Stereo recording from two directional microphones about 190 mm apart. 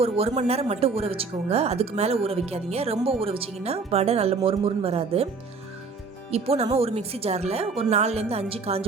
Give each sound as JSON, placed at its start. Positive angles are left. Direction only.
{"t": 0.0, "sound": "speech", "side_deg": -30}
{"t": 6.3, "sound": "speech", "side_deg": -35}